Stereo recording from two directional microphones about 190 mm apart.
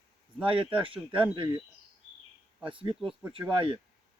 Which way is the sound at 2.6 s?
25° right (ahead or behind).